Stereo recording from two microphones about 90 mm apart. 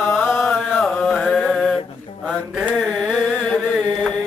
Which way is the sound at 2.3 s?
10° right (ahead or behind).